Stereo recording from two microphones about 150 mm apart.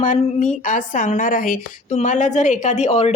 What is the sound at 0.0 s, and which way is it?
A woman's voice, 55° left (ahead or behind).